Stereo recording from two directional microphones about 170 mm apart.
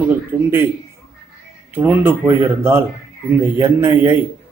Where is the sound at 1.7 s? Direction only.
15° right (ahead or behind).